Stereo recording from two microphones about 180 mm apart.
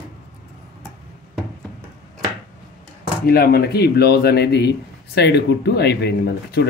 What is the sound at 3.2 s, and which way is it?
Speech, 60° left (ahead or behind).